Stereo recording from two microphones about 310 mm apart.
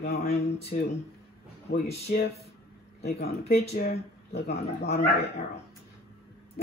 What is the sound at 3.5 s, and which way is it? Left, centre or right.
Speech, left.